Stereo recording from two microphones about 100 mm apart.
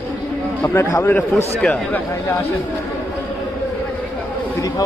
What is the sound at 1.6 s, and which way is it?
Speech, 10° left (ahead or behind).